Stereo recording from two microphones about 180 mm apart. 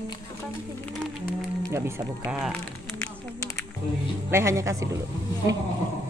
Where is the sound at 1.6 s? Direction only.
15° right (ahead or behind).